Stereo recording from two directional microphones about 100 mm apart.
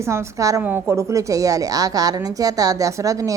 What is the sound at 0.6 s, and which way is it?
Speech, 20° right (ahead or behind).